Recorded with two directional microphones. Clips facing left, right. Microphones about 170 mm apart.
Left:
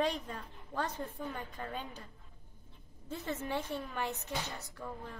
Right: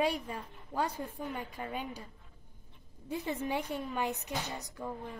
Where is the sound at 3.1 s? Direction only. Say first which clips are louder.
Right 3 dB; 15° right (ahead or behind).